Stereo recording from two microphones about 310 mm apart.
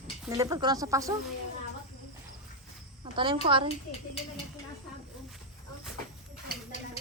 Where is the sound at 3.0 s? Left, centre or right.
Centre.